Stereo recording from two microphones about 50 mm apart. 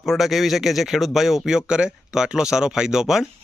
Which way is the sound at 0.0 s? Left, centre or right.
Centre.